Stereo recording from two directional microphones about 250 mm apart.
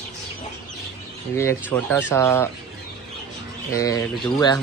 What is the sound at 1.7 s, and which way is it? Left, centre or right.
Speech, centre.